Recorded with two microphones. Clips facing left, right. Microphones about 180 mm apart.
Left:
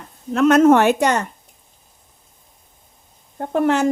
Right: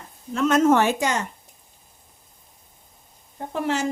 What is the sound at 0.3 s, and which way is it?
Speech, 65° left (ahead or behind).